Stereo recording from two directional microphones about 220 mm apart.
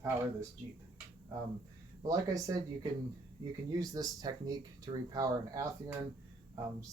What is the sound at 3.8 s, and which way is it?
Speech, 15° right (ahead or behind).